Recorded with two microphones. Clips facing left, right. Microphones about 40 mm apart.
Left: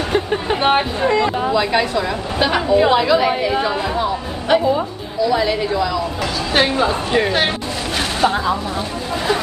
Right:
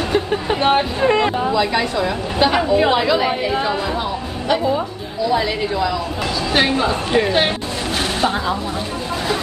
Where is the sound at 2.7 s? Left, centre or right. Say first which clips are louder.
Left 2 dB; centre.